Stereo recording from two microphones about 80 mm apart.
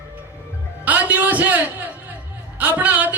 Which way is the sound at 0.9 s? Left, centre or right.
Right.